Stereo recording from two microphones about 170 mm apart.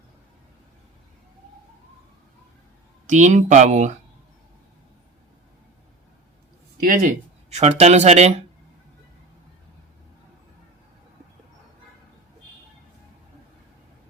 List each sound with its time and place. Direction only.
3.1 s speech: 45° right (ahead or behind)
6.8 s speech: 55° right (ahead or behind)
7.8 s speech: 40° right (ahead or behind)